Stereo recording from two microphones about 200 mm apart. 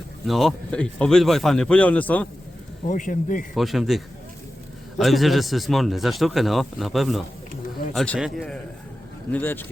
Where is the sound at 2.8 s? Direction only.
40° left (ahead or behind).